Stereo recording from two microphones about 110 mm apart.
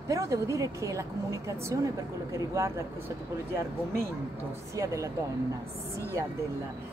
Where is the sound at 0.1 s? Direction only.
30° right (ahead or behind).